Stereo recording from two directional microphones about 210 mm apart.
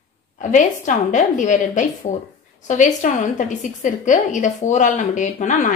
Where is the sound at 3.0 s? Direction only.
35° left (ahead or behind).